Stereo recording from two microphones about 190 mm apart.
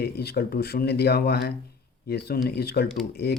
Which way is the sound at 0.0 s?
60° left (ahead or behind).